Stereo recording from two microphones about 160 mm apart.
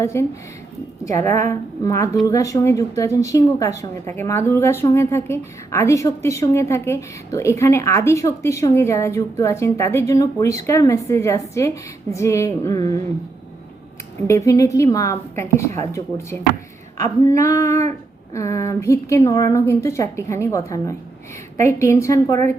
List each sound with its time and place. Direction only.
0.0 s a woman's voice: 15° left (ahead or behind)
14.3 s a woman's voice: 20° left (ahead or behind)